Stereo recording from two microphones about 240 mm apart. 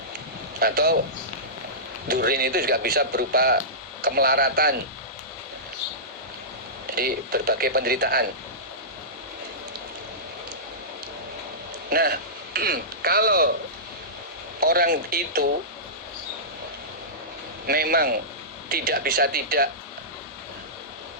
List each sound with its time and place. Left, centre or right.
0.6 s speech: right
2.0 s speech: right
6.9 s speech: right
11.9 s speech: right
14.6 s speech: right
17.7 s speech: right